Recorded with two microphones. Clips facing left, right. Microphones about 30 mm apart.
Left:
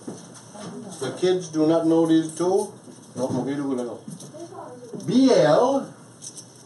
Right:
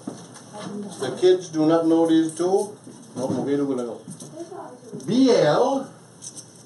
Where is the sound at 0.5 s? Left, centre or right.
Right.